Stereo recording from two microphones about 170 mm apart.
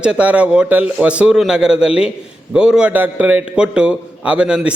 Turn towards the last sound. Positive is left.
turn(degrees=-5)  # may be behind; listen again after turning